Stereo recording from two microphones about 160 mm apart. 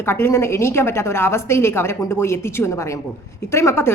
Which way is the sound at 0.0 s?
15° left (ahead or behind).